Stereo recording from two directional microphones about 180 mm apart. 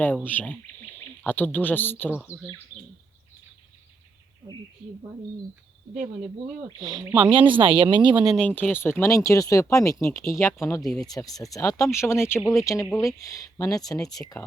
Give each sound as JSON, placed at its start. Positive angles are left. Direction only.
{"t": 0.3, "sound": "speech", "side_deg": 10}
{"t": 6.7, "sound": "speech", "side_deg": -25}
{"t": 8.4, "sound": "speech", "side_deg": 10}
{"t": 10.8, "sound": "speech", "side_deg": 0}
{"t": 11.1, "sound": "speech", "side_deg": 20}